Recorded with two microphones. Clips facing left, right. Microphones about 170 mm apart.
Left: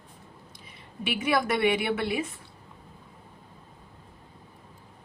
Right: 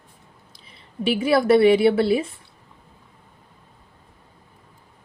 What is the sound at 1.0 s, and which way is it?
A woman's voice, 30° right (ahead or behind).